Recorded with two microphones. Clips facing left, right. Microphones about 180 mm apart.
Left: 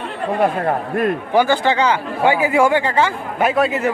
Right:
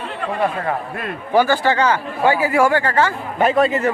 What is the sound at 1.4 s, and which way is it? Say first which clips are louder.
A man's voice: even; 15° left (ahead or behind).